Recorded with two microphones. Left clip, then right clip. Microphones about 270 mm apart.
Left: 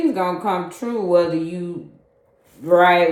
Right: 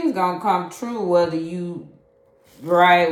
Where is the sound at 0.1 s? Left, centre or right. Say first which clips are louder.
Right 1 dB; right.